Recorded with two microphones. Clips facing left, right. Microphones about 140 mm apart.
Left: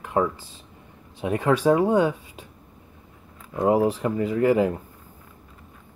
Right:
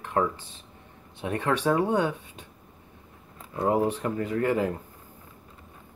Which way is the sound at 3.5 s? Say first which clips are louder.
Left 4 dB; 10° left (ahead or behind).